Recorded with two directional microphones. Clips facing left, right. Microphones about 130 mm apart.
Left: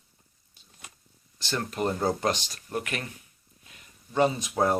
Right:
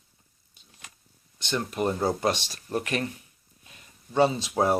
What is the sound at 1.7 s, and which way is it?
Speech, 10° right (ahead or behind).